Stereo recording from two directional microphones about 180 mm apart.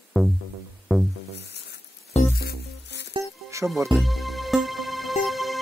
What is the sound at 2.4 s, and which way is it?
Music, 60° left (ahead or behind).